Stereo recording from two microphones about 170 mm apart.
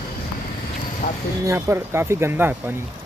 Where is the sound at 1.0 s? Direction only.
55° left (ahead or behind).